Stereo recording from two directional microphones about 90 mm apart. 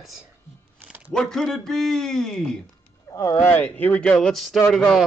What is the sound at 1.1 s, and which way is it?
A man's voice, 5° left (ahead or behind).